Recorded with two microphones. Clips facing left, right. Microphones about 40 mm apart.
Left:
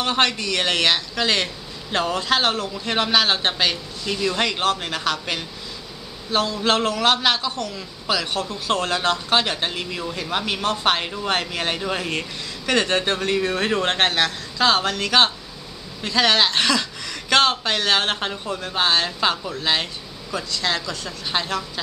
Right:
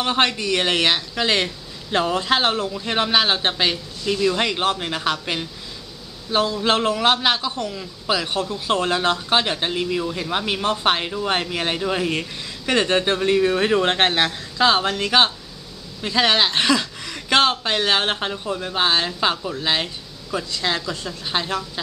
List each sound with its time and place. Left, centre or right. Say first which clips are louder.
0.0 s speech: right 1 dB; centre
2.7 s speech: even; centre
4.0 s a woman's voice: right 3 dB; centre
21.3 s speech: even; centre